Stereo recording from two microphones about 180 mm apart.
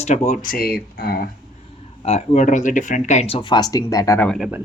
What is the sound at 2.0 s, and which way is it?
Speech, 40° left (ahead or behind).